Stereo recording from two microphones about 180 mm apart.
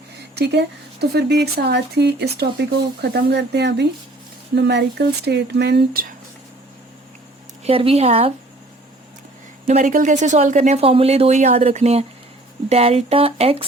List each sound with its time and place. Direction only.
0.3 s speech: 70° right (ahead or behind); by 6.1 s 55° right (ahead or behind)
7.6 s speech: 30° right (ahead or behind)
9.6 s speech: 45° right (ahead or behind)